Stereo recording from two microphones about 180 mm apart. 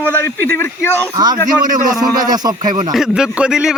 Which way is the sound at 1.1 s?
25° right (ahead or behind).